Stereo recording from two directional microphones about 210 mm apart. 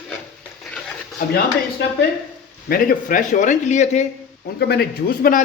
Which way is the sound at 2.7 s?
40° left (ahead or behind).